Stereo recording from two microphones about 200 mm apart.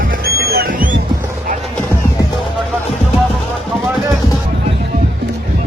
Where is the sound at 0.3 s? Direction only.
50° right (ahead or behind).